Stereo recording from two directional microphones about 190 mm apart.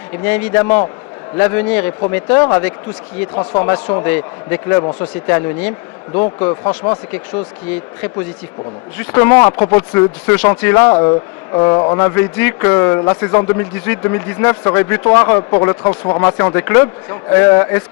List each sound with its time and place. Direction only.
0.2 s a man's voice: 10° left (ahead or behind)
7.1 s a man's voice: 10° left (ahead or behind)
10.9 s speech: 25° left (ahead or behind)
11.9 s a man's voice: 10° left (ahead or behind)